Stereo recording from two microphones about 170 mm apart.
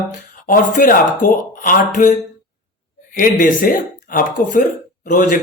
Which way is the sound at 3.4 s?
55° left (ahead or behind).